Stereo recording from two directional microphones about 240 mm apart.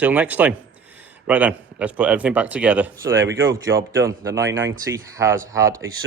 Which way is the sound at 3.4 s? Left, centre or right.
Right.